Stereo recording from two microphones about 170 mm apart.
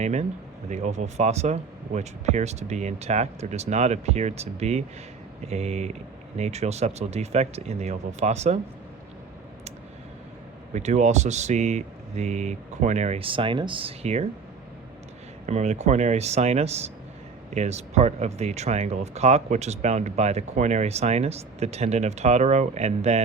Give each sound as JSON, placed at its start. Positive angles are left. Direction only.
{"t": 0.0, "sound": "speech", "side_deg": -45}
{"t": 10.8, "sound": "speech", "side_deg": -45}
{"t": 15.4, "sound": "speech", "side_deg": -40}